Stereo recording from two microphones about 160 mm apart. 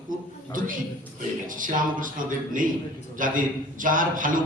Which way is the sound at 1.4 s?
55° right (ahead or behind).